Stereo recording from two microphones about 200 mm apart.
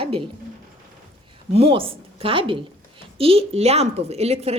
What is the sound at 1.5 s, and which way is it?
A woman's voice, 30° right (ahead or behind).